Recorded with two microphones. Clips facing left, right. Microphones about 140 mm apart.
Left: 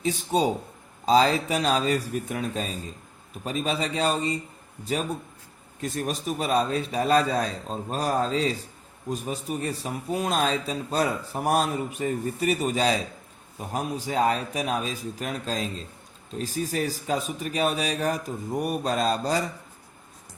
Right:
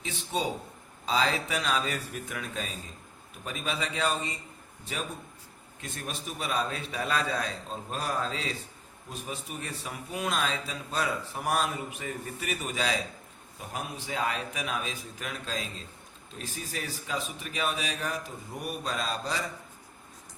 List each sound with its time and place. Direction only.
0.0 s a man's voice: 40° left (ahead or behind)
5.8 s a man's voice: 40° left (ahead or behind)